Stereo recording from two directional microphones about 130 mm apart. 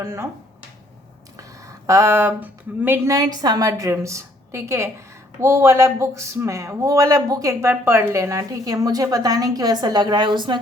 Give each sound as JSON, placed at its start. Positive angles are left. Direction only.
{"t": 0.0, "sound": "a woman's voice", "side_deg": -20}
{"t": 1.9, "sound": "a woman's voice", "side_deg": -20}